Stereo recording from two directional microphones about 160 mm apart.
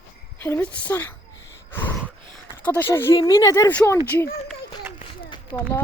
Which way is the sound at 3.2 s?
25° left (ahead or behind).